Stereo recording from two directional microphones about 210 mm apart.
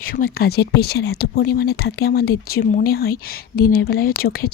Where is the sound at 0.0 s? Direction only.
45° left (ahead or behind).